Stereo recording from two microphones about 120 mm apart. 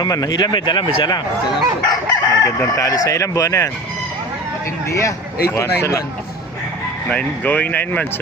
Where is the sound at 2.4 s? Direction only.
30° left (ahead or behind).